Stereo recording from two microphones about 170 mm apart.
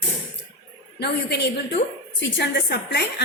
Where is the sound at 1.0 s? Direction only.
80° left.